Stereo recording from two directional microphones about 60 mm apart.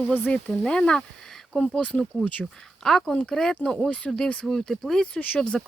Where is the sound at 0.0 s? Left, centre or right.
Left.